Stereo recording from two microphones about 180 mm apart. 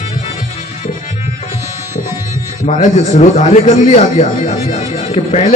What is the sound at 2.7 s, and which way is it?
A man's voice, 40° left (ahead or behind).